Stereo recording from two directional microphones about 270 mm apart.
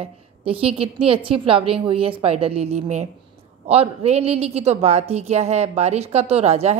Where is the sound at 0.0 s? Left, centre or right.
Right.